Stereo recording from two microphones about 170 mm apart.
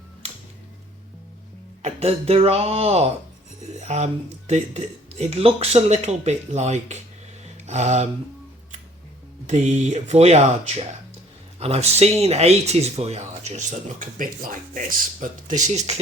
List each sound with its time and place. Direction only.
1.8 s speech: 35° right (ahead or behind)
9.5 s speech: 45° right (ahead or behind)